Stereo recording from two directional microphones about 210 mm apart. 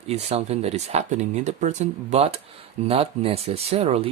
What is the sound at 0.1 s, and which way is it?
Speech, 30° right (ahead or behind).